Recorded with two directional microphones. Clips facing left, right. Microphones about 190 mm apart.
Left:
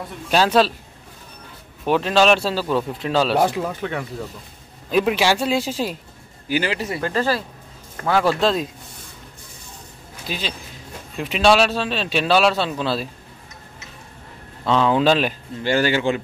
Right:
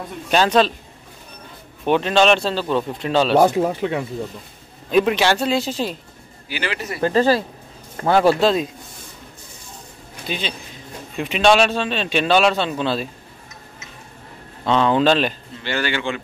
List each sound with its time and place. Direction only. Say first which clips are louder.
0.3 s speech: even; 5° left (ahead or behind)
1.9 s speech: right 1 dB; centre (ahead or behind)
3.3 s speech: right 5 dB; 30° right (ahead or behind)
3.8 s speech: right 4 dB; 20° right (ahead or behind)
4.9 s speech: right 2 dB; 5° left (ahead or behind)
6.7 s speech: left 3 dB; 30° left (ahead or behind)
7.0 s speech: right 8 dB; 25° right (ahead or behind)
8.4 s speech: right 2 dB; centre (ahead or behind)
10.2 s speech: right 2 dB; centre (ahead or behind)
14.7 s speech: right 1 dB; 5° left (ahead or behind)
15.6 s speech: left 5 dB; 40° left (ahead or behind)